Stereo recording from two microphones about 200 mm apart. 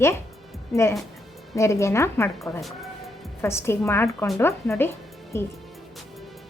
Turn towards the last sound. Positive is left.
turn(degrees=15)  # may be behind; listen again after turning